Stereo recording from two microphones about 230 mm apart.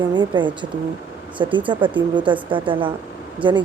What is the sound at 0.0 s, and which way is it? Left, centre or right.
Speech, centre.